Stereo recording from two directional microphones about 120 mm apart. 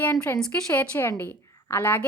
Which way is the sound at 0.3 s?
5° left (ahead or behind).